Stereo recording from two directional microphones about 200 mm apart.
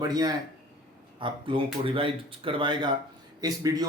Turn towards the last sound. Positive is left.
turn(degrees=-20)  # may be behind; listen again after turning